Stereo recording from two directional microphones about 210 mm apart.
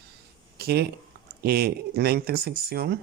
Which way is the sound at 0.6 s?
50° right (ahead or behind).